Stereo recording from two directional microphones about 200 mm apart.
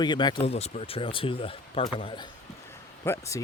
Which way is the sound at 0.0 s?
20° left (ahead or behind).